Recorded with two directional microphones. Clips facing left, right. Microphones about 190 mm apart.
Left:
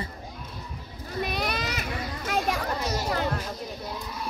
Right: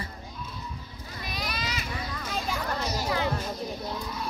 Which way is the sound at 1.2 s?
60° left (ahead or behind).